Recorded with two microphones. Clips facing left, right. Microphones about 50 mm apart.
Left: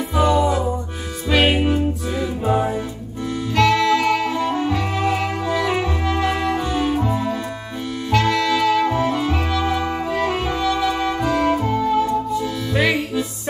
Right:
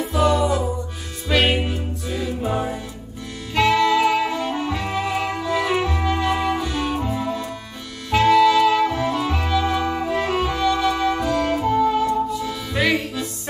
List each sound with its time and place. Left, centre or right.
0.1 s music: centre
3.5 s music: centre
6.0 s music: centre
6.7 s music: centre
8.1 s saxophone: centre
8.9 s music: centre
11.6 s music: centre